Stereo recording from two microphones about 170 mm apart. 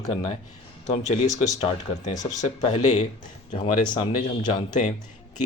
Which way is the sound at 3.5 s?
25° left (ahead or behind).